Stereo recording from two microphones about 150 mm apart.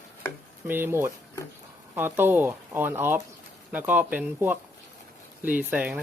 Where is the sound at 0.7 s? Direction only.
15° right (ahead or behind).